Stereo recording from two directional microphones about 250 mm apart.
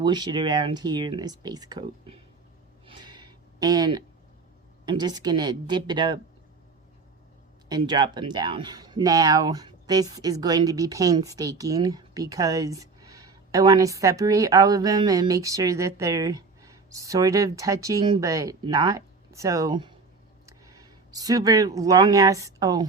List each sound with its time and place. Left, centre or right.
0.0 s speech: centre
2.8 s a sound: centre
4.9 s speech: centre
7.7 s speech: centre